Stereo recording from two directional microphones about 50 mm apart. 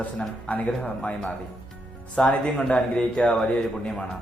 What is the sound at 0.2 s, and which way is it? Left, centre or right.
A man's voice, left.